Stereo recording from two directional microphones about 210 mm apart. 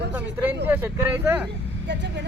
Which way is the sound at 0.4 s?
10° right (ahead or behind).